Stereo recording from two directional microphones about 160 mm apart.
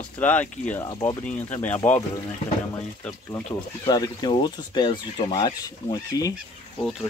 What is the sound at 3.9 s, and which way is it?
Speech, 25° left (ahead or behind).